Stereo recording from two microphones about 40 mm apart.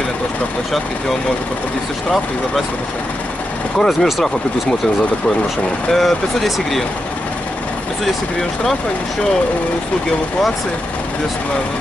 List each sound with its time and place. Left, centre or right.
3.7 s speech: centre
5.9 s speech: centre
8.0 s speech: centre